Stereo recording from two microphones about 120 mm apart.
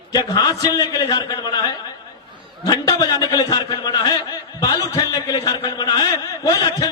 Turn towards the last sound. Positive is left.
turn(degrees=30)  # may be behind; listen again after turning